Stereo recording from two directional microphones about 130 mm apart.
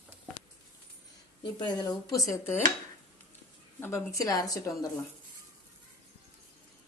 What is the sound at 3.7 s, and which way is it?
Speech, 20° left (ahead or behind).